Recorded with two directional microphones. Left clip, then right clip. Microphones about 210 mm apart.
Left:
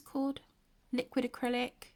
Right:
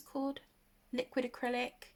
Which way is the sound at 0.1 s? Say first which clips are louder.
Left 2 dB; 35° left (ahead or behind).